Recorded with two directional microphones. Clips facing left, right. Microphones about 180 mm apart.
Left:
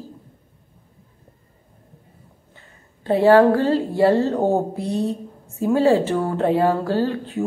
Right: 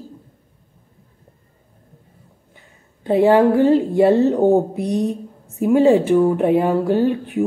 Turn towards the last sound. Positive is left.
turn(degrees=-15)  # may be behind; listen again after turning